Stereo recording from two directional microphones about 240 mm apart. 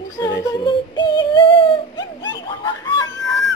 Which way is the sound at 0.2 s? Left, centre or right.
Centre.